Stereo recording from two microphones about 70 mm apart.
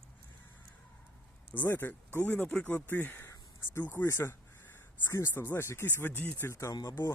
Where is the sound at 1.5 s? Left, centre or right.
Left.